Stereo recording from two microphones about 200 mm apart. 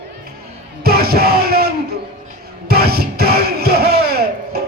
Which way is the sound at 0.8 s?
50° right (ahead or behind).